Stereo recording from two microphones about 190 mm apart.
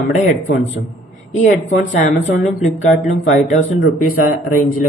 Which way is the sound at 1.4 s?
40° left (ahead or behind).